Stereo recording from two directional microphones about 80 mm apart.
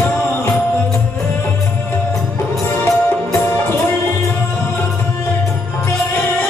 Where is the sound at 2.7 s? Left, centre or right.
Left.